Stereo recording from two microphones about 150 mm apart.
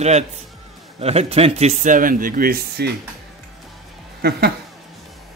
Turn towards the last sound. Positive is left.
turn(degrees=-90)